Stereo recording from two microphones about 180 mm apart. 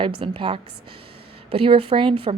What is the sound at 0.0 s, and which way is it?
Speech, 30° right (ahead or behind).